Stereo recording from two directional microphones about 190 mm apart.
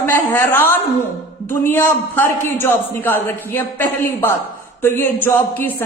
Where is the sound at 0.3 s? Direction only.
10° left (ahead or behind).